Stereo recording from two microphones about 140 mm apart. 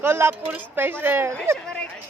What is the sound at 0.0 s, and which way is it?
Speech, 15° right (ahead or behind).